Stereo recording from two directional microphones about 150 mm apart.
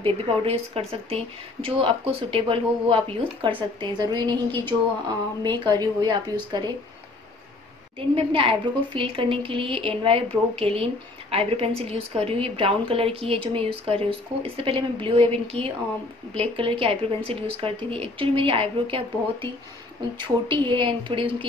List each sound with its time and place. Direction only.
0.0 s a woman's voice: 40° right (ahead or behind)
8.1 s a woman's voice: 35° right (ahead or behind)